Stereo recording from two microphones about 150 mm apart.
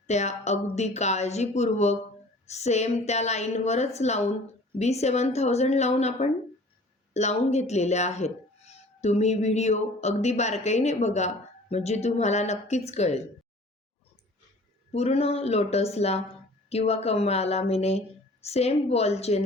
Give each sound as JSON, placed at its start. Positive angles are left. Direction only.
{"t": 0.1, "sound": "speech", "side_deg": 50}
{"t": 14.9, "sound": "speech", "side_deg": 45}